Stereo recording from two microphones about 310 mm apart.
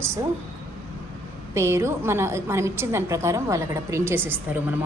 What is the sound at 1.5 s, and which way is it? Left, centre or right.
A woman's voice, centre.